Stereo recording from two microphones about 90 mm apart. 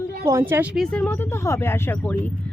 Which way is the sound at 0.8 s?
15° left (ahead or behind).